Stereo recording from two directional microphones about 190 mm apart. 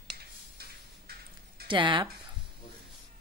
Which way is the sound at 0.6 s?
55° right (ahead or behind).